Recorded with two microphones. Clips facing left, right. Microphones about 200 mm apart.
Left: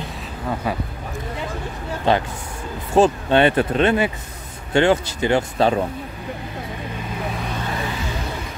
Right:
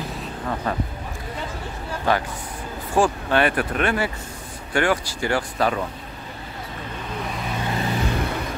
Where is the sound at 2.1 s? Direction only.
25° left (ahead or behind).